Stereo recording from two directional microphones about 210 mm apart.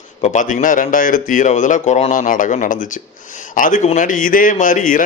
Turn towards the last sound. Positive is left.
turn(degrees=40)  # may be behind; listen again after turning